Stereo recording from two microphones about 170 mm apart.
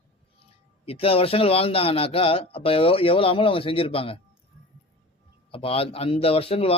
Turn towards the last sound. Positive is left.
turn(degrees=35)  # may be behind; listen again after turning